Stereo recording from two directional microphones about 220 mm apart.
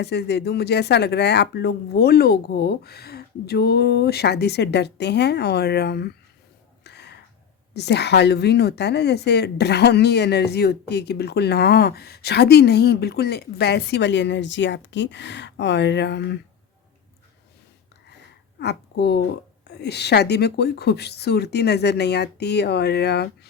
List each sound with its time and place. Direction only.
0.0 s a woman's voice: 50° left (ahead or behind)
6.8 s a sound: 50° left (ahead or behind)
7.7 s a woman's voice: 50° left (ahead or behind)
18.6 s a woman's voice: 50° left (ahead or behind)